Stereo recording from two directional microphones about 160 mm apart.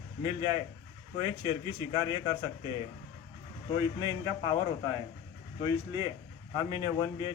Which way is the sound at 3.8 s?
25° left (ahead or behind).